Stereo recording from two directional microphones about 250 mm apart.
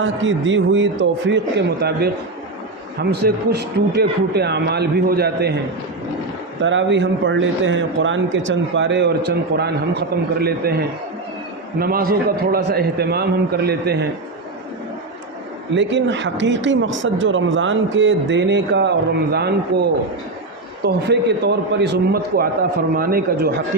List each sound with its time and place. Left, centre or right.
0.0 s a man's voice: right
6.6 s a man's voice: right
15.7 s a man's voice: right
20.8 s a man's voice: right